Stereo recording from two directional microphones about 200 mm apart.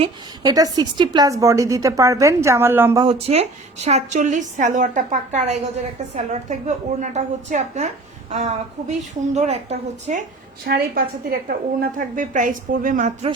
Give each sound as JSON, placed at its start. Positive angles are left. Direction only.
{"t": 0.0, "sound": "a woman's voice", "side_deg": -20}
{"t": 3.0, "sound": "a woman's voice", "side_deg": -30}
{"t": 10.7, "sound": "a woman's voice", "side_deg": -45}